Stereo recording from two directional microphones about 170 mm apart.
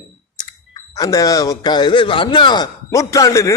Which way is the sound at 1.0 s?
20° left (ahead or behind).